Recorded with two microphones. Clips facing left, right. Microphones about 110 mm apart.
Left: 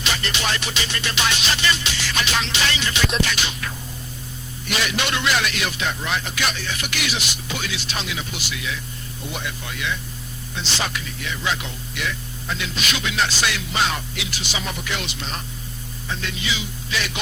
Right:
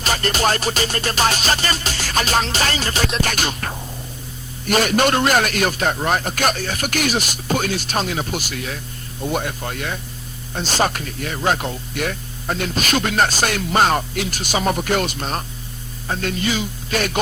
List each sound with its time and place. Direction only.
0.0 s speech: 45° right (ahead or behind)